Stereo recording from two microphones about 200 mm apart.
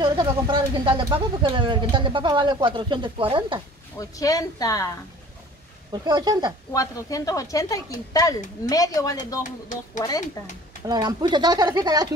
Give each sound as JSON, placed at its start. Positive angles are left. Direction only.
{"t": 0.0, "sound": "speech", "side_deg": -25}
{"t": 4.0, "sound": "a woman's voice", "side_deg": 15}
{"t": 5.9, "sound": "speech", "side_deg": -20}
{"t": 6.7, "sound": "a woman's voice", "side_deg": 15}
{"t": 9.4, "sound": "speech", "side_deg": 40}
{"t": 10.9, "sound": "speech", "side_deg": -20}